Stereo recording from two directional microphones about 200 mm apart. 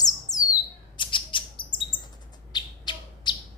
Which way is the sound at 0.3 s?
35° left (ahead or behind).